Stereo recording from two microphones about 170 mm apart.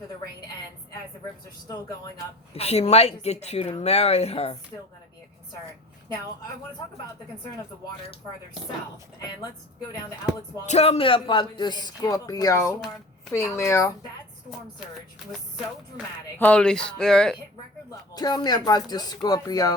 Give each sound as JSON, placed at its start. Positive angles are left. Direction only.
{"t": 2.5, "sound": "speech", "side_deg": 40}
{"t": 10.7, "sound": "speech", "side_deg": 35}
{"t": 16.4, "sound": "speech", "side_deg": 5}
{"t": 18.1, "sound": "speech", "side_deg": 25}